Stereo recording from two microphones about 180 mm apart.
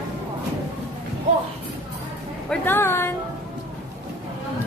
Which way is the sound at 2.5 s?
10° left (ahead or behind).